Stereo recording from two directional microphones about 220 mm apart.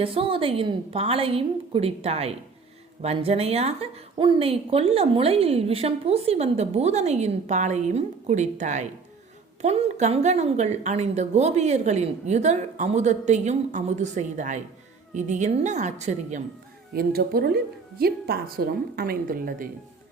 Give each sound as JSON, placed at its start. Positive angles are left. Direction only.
{"t": 0.0, "sound": "a woman's voice", "side_deg": -25}
{"t": 16.9, "sound": "speech", "side_deg": -45}